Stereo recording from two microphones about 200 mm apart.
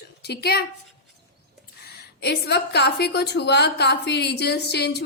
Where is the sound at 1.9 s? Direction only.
55° left (ahead or behind).